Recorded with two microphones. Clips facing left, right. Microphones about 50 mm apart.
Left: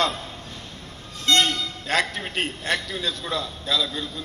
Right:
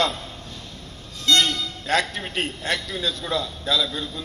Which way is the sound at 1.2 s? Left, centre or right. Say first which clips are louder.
Even; left.